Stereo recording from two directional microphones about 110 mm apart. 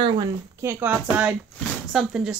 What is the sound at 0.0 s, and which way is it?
Speech, 45° right (ahead or behind).